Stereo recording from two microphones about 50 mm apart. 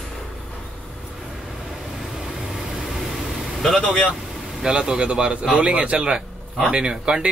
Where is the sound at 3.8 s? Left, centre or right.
Centre.